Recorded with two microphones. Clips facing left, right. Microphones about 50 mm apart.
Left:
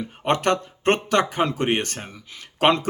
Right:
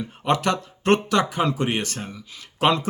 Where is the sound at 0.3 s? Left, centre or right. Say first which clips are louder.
Left 1 dB; left.